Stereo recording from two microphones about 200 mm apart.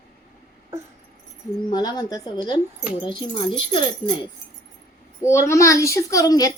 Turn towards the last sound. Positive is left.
turn(degrees=20)  # may be behind; listen again after turning